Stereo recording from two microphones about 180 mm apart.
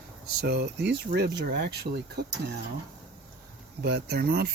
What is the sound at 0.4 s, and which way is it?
Speech, 65° right (ahead or behind).